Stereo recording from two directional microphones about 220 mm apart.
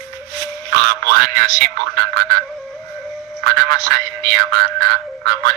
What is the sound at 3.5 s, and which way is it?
Speech, 55° right (ahead or behind).